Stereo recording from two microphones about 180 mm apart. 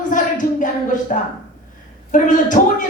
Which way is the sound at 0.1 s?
45° left (ahead or behind).